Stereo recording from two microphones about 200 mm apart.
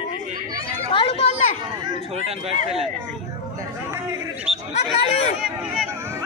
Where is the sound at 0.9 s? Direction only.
30° left (ahead or behind).